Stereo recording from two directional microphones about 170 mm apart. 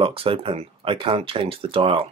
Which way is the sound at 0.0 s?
30° right (ahead or behind).